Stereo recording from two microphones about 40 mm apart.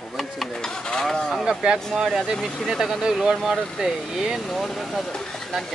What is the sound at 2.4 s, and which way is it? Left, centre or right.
Speech, centre.